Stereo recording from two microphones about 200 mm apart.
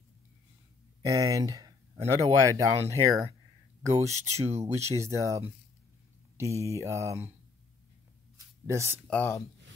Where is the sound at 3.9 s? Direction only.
15° right (ahead or behind).